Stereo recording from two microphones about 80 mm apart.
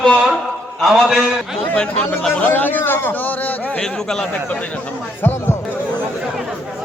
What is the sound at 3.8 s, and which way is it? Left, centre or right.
Speech, centre.